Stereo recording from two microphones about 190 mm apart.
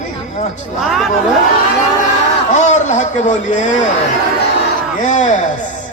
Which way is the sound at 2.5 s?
40° left (ahead or behind).